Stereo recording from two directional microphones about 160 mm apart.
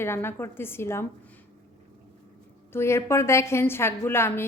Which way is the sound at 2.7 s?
15° left (ahead or behind).